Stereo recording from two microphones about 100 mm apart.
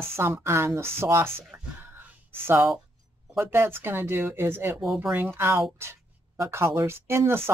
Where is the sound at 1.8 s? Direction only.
20° right (ahead or behind).